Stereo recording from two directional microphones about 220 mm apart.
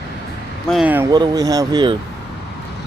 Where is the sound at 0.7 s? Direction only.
5° right (ahead or behind); by 1.9 s 20° right (ahead or behind).